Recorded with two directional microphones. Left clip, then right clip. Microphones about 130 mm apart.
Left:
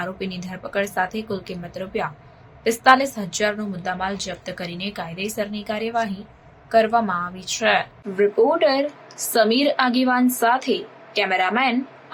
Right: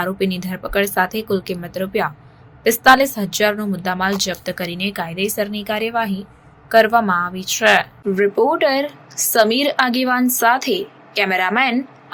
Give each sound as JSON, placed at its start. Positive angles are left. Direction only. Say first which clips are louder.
{"t": 0.0, "sound": "a woman's voice", "louder": "right 8 dB", "side_deg": -35}